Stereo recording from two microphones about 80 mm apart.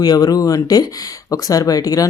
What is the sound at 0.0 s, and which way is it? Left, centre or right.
Speech, left.